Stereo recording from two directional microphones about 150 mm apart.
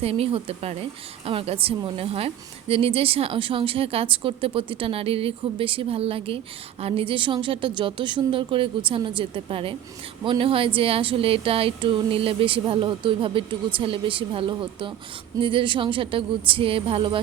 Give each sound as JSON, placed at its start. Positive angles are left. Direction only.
{"t": 0.0, "sound": "a woman's voice", "side_deg": -40}